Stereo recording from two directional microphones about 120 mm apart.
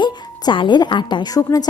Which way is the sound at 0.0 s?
40° left (ahead or behind).